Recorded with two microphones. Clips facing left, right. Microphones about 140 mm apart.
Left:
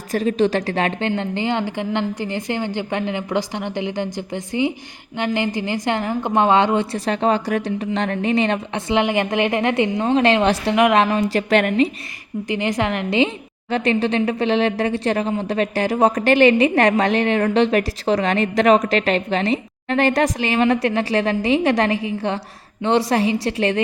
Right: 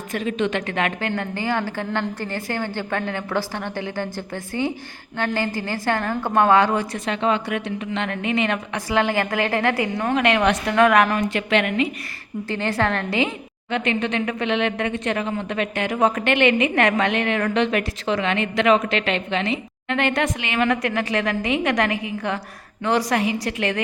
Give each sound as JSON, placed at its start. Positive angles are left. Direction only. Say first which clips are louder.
{"t": 0.1, "sound": "a woman's voice", "louder": "left 5 dB", "side_deg": 35}
{"t": 12.5, "sound": "a woman's voice", "louder": "left 1 dB", "side_deg": 15}
{"t": 13.7, "sound": "a woman's voice", "louder": "left 4 dB", "side_deg": 35}